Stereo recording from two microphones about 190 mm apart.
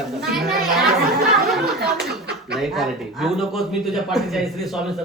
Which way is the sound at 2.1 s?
60° right (ahead or behind).